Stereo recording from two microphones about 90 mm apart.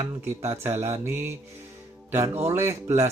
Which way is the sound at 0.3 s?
25° right (ahead or behind).